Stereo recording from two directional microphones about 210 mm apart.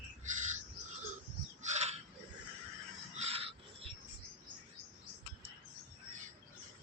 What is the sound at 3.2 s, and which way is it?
Crow, 30° right (ahead or behind).